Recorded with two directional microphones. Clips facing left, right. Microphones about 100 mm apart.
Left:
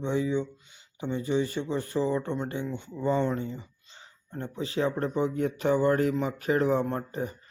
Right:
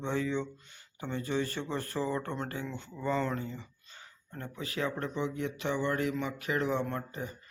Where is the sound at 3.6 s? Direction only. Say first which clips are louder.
Left 1 dB; 25° left (ahead or behind).